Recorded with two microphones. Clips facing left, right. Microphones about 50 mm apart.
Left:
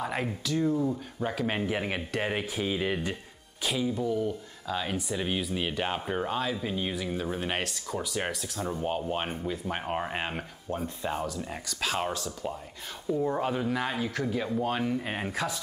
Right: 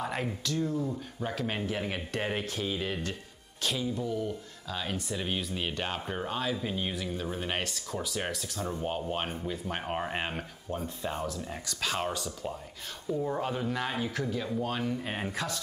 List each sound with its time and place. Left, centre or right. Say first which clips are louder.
0.0 s speech: left 2 dB; centre
1.6 s speech: left 3 dB; left
2.0 s speech: left 2 dB; centre
13.1 s speech: left 3 dB; centre
14.2 s speech: left 3 dB; centre